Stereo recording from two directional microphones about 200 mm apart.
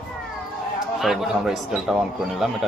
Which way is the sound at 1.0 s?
Centre (ahead or behind).